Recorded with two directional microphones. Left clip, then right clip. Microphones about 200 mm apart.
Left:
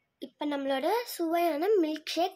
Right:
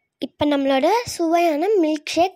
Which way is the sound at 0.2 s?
40° right (ahead or behind).